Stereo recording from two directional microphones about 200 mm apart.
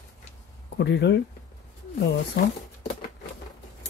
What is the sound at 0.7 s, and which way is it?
Speech, 60° left (ahead or behind).